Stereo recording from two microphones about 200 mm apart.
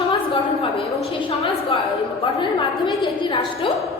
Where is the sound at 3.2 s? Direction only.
25° left (ahead or behind).